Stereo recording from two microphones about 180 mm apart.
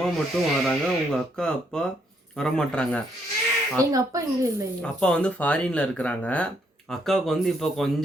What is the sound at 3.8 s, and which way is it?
Speech, 20° right (ahead or behind).